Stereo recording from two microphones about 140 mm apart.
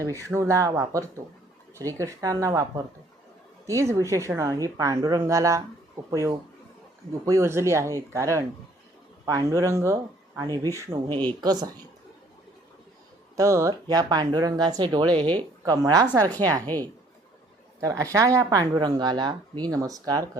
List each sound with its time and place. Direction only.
0.0 s speech: 20° right (ahead or behind)
10.6 s speech: 20° left (ahead or behind)
11.3 s speech: 30° right (ahead or behind)
13.3 s speech: 20° right (ahead or behind)
16.7 s speech: 15° left (ahead or behind)
17.7 s speech: 25° right (ahead or behind)